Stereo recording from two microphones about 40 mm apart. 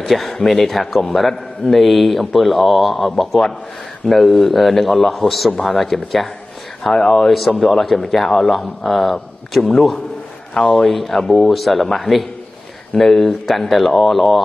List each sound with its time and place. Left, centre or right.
0.0 s a man's voice: centre